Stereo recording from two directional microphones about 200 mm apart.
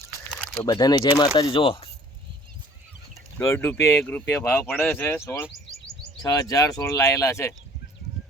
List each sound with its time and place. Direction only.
0.6 s speech: 20° left (ahead or behind)
3.3 s speech: 10° left (ahead or behind)